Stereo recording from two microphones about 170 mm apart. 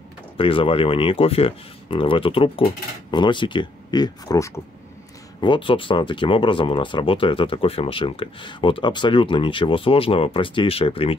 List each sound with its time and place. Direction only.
0.4 s speech: 30° left (ahead or behind)